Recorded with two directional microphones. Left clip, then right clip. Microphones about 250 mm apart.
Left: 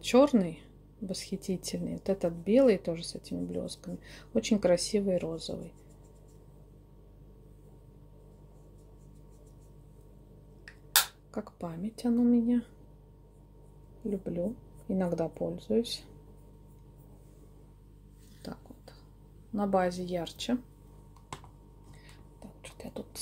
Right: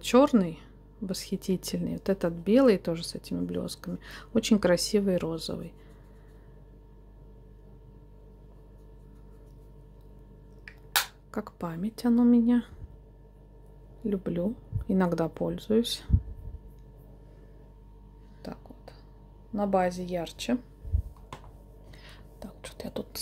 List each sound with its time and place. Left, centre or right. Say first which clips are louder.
0.0 s speech: right 2 dB; centre
11.3 s speech: right 4 dB; centre
14.0 s speech: right 3 dB; centre
18.4 s a sound: right 3 dB; centre
19.5 s a woman's voice: right 2 dB; centre
22.0 s whispering: right 7 dB; right